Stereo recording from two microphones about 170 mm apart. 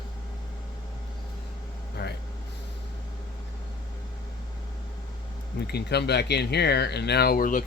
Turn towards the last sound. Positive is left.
turn(degrees=55)  # may be behind; listen again after turning